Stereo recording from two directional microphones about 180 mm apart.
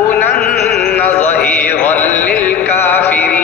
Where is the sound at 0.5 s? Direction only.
60° left (ahead or behind).